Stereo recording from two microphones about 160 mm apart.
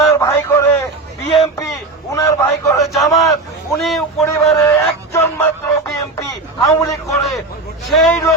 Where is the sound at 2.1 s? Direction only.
20° left (ahead or behind).